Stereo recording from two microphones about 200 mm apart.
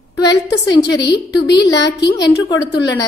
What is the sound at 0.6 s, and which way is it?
Speech, 20° left (ahead or behind).